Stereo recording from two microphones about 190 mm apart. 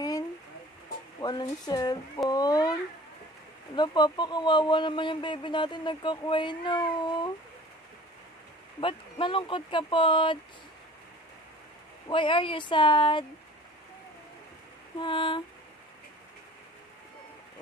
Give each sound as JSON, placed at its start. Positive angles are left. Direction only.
{"t": 1.2, "sound": "speech", "side_deg": 20}
{"t": 3.7, "sound": "speech", "side_deg": 25}
{"t": 8.8, "sound": "speech", "side_deg": 25}
{"t": 12.1, "sound": "speech", "side_deg": 25}
{"t": 15.0, "sound": "speech", "side_deg": 25}